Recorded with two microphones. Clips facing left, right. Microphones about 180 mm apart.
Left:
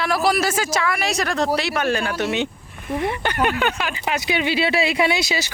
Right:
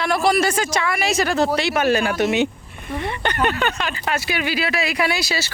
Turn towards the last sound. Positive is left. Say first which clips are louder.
# left 2 dB
turn(degrees=20)  # may be behind; listen again after turning